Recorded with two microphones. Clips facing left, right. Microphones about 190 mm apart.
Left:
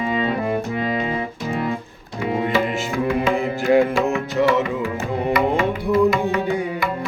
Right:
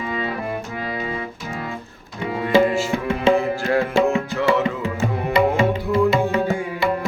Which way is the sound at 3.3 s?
20° left (ahead or behind).